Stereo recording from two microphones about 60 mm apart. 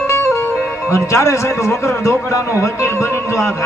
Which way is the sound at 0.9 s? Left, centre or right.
Left.